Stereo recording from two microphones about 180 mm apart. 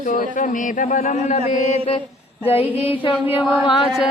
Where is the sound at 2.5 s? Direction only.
30° left (ahead or behind).